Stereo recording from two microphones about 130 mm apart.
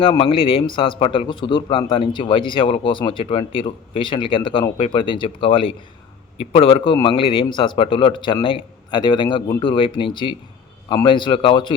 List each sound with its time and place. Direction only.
0.0 s a man's voice: 45° left (ahead or behind)